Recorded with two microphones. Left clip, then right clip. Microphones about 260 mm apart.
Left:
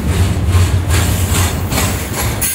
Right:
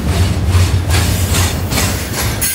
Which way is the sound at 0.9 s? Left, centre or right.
Centre.